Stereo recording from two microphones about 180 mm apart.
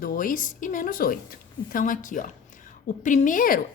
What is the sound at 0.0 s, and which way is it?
A woman's voice, 50° left (ahead or behind).